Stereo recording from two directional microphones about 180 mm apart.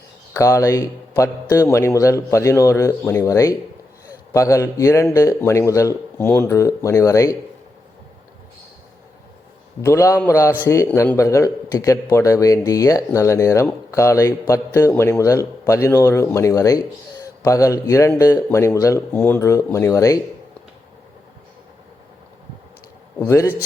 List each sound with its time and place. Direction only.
0.3 s a man's voice: 15° left (ahead or behind)
9.8 s a man's voice: 15° left (ahead or behind)
23.1 s a man's voice: 15° left (ahead or behind)